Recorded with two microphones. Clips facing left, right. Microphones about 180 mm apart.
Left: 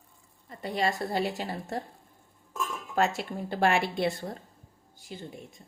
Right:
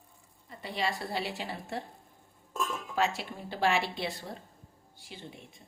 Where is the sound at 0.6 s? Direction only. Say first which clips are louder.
Left 5 dB; 45° left (ahead or behind).